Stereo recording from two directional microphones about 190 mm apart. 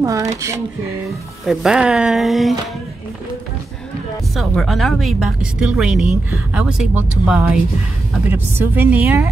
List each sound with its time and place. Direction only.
0.0 s a woman's voice: 15° right (ahead or behind)
1.4 s a woman's voice: centre (ahead or behind)
4.4 s a woman's voice: centre (ahead or behind)